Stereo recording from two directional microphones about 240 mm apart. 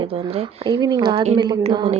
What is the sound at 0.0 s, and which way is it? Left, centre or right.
A woman's voice, centre.